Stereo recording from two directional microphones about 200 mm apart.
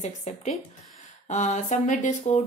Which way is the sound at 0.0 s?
35° left (ahead or behind).